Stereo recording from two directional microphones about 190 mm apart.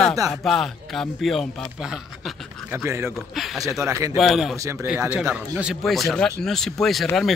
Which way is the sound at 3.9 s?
15° right (ahead or behind).